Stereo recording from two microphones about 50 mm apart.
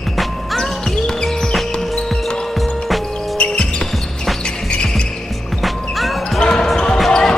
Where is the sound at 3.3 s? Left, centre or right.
Centre.